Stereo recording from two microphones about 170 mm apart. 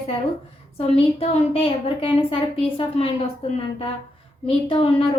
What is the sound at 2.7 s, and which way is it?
Speech, 30° left (ahead or behind).